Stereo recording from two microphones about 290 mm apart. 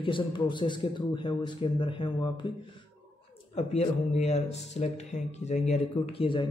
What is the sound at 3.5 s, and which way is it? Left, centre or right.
Speech, left.